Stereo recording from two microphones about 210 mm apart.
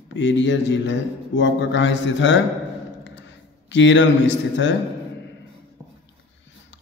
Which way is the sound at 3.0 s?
60° left (ahead or behind).